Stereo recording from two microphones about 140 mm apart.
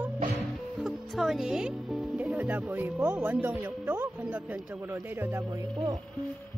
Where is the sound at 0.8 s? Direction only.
Centre (ahead or behind).